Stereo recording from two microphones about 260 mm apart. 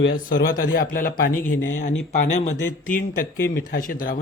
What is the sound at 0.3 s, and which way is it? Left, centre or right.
Speech, left.